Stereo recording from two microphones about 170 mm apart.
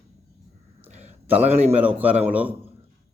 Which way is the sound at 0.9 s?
40° right (ahead or behind).